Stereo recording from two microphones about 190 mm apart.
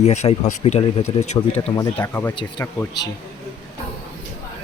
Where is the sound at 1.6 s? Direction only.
25° left (ahead or behind).